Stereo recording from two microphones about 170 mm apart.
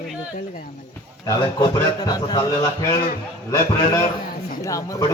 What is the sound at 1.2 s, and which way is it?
A man's voice, 20° left (ahead or behind).